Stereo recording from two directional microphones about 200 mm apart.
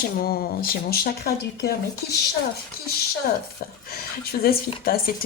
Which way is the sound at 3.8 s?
50° left (ahead or behind).